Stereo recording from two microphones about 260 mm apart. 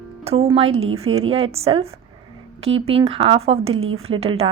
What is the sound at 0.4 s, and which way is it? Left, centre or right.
A woman's voice, right.